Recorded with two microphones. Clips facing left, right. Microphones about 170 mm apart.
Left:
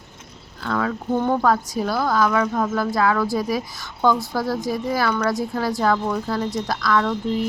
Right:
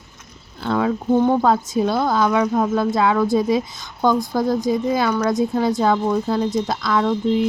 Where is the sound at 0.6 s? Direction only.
25° right (ahead or behind).